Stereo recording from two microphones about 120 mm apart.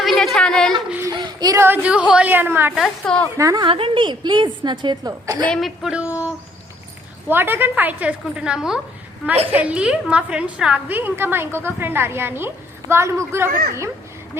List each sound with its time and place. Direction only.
0.0 s a sound: centre (ahead or behind)
1.0 s child singing: 30° right (ahead or behind)
1.5 s a woman's voice: 15° right (ahead or behind)
2.7 s a woman's voice: centre (ahead or behind)
3.3 s a woman's voice: 30° right (ahead or behind)
3.7 s a woman's voice: 50° right (ahead or behind); by 5.5 s 30° right (ahead or behind)
5.5 s a woman's voice: centre (ahead or behind); by 13.9 s 25° right (ahead or behind)